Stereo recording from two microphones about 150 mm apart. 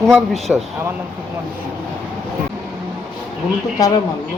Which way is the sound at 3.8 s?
25° left (ahead or behind).